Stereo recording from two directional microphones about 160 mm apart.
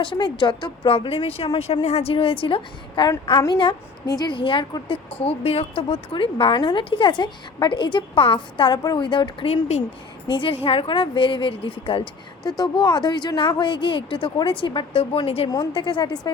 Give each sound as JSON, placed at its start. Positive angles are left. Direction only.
{"t": 0.0, "sound": "a woman's voice", "side_deg": 30}